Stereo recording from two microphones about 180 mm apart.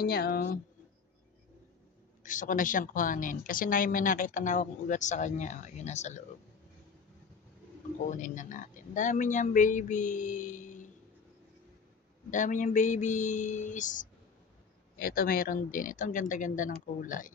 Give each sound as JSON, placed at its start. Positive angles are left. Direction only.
{"t": 0.0, "sound": "speech", "side_deg": 55}
{"t": 2.2, "sound": "a woman's voice", "side_deg": 45}
{"t": 8.1, "sound": "a woman's voice", "side_deg": 45}
{"t": 12.3, "sound": "a woman's voice", "side_deg": 45}